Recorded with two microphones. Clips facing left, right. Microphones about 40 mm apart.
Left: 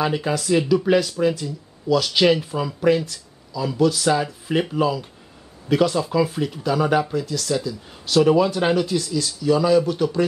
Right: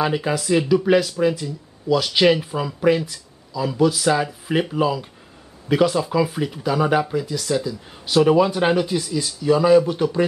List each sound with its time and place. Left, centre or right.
0.0 s speech: centre